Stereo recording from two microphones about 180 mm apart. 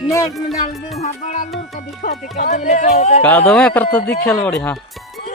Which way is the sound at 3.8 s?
60° left (ahead or behind).